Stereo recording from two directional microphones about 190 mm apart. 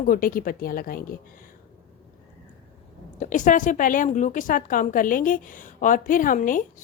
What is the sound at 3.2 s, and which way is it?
A woman's voice, 40° left (ahead or behind).